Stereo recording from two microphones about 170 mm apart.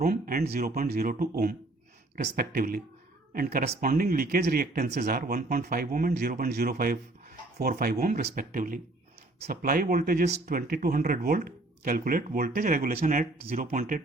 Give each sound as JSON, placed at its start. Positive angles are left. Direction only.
{"t": 0.0, "sound": "speech", "side_deg": -60}